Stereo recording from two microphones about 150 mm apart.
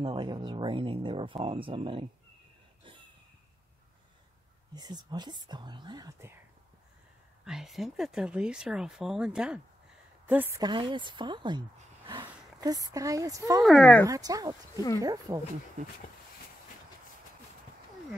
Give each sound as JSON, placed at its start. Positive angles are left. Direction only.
{"t": 0.0, "sound": "speech", "side_deg": -35}
{"t": 2.8, "sound": "a sound", "side_deg": -35}
{"t": 4.7, "sound": "speech", "side_deg": -25}
{"t": 7.4, "sound": "a woman's voice", "side_deg": -5}
{"t": 10.6, "sound": "speech", "side_deg": -30}
{"t": 13.6, "sound": "speech", "side_deg": 0}
{"t": 14.0, "sound": "speech", "side_deg": -25}